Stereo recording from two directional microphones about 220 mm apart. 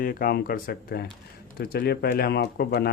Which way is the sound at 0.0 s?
40° left (ahead or behind).